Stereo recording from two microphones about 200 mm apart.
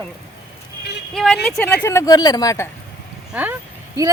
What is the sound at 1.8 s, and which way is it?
Speech, 15° left (ahead or behind).